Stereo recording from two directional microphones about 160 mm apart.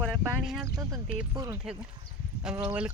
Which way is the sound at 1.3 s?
20° right (ahead or behind).